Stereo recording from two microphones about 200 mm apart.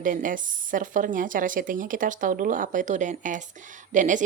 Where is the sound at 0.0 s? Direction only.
40° right (ahead or behind).